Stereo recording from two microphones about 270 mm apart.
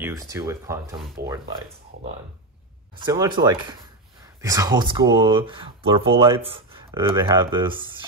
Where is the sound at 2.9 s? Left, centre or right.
Centre.